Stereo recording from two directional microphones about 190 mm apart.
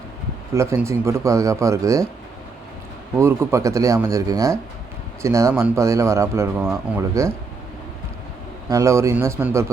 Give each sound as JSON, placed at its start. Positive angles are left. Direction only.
{"t": 0.5, "sound": "speech", "side_deg": -15}
{"t": 3.2, "sound": "speech", "side_deg": -15}
{"t": 8.7, "sound": "speech", "side_deg": -15}